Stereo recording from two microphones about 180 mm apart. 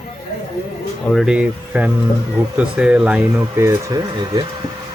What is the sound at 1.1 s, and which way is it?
Speech, centre (ahead or behind).